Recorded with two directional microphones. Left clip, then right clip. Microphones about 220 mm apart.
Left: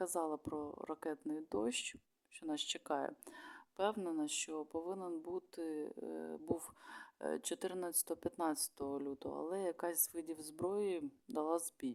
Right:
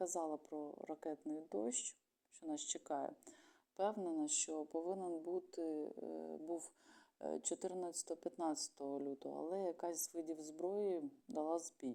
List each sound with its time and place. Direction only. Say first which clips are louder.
0.0 s speech: left 3 dB; 20° left (ahead or behind)